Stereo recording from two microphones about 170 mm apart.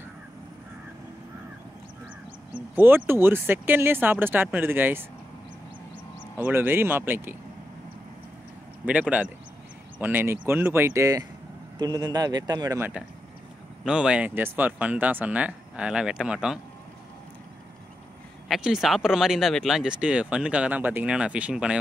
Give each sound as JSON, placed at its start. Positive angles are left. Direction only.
{"t": 2.7, "sound": "speech", "side_deg": -10}
{"t": 6.3, "sound": "speech", "side_deg": -10}
{"t": 8.8, "sound": "speech", "side_deg": -10}
{"t": 18.5, "sound": "speech", "side_deg": 0}